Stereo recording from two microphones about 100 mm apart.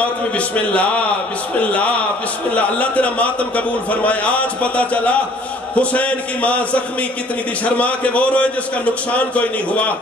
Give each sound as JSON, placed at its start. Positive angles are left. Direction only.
{"t": 0.6, "sound": "a man's voice", "side_deg": 15}